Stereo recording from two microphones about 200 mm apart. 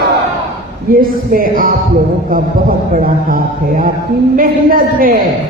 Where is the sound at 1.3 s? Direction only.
45° right (ahead or behind).